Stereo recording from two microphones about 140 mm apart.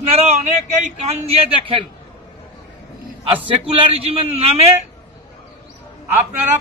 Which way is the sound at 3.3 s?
45° right (ahead or behind).